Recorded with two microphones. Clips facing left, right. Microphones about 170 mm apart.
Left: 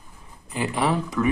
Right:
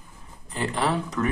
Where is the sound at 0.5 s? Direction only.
10° left (ahead or behind).